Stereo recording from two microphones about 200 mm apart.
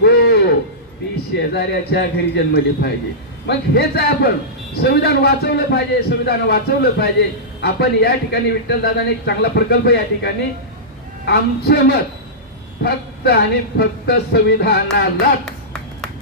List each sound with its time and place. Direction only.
0.0 s livestock: 55° left (ahead or behind)
1.1 s a man's voice: 55° left (ahead or behind)
15.4 s a sound: 5° left (ahead or behind)